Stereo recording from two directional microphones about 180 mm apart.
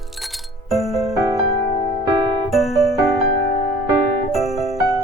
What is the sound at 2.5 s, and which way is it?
Music, centre (ahead or behind).